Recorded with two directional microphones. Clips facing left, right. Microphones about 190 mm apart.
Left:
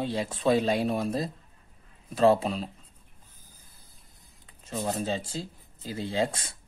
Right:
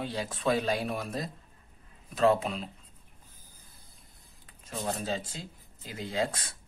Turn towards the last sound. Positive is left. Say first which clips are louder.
# left 3 dB
turn(degrees=30)  # may be behind; listen again after turning